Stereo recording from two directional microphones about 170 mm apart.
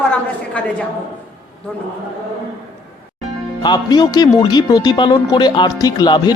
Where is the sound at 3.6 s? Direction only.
25° left (ahead or behind).